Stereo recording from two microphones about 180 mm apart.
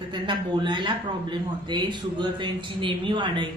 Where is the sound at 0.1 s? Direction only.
25° right (ahead or behind).